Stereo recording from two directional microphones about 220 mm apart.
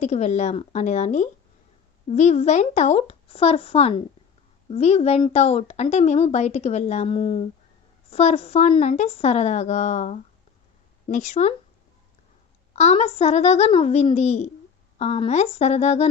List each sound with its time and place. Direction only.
0.0 s speech: 30° left (ahead or behind)
12.7 s speech: 30° left (ahead or behind)